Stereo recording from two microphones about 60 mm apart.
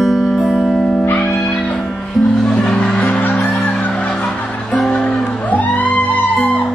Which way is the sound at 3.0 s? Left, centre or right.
Left.